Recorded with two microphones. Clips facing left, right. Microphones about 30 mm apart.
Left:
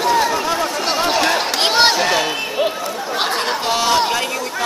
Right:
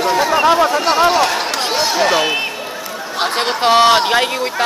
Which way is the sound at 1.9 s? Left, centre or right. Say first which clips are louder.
Right 3 dB; centre.